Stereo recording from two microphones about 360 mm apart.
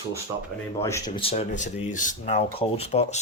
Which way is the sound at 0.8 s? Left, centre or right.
Centre.